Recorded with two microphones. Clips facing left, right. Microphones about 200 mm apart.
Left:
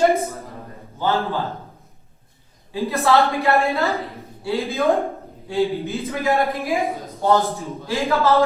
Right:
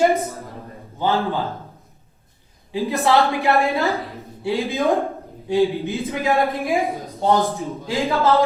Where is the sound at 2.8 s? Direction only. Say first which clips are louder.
Even; 15° right (ahead or behind).